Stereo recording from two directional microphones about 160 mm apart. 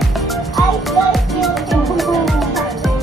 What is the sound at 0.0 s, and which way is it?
Music, centre (ahead or behind).